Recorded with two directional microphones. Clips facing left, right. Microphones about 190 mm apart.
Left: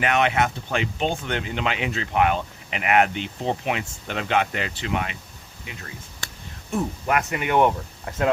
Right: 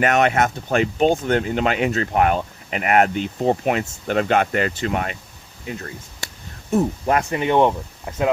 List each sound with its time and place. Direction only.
0.0 s speech: 45° right (ahead or behind); by 8.3 s 20° right (ahead or behind)